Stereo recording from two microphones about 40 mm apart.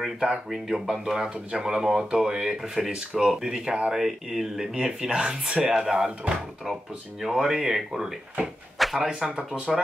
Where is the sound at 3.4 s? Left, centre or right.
Centre.